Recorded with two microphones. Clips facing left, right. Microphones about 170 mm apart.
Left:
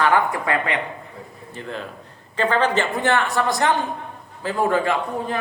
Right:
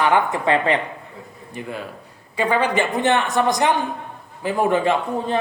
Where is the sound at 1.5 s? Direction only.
10° right (ahead or behind).